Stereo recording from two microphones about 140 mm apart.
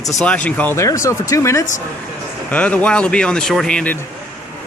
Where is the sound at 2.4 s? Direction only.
10° left (ahead or behind).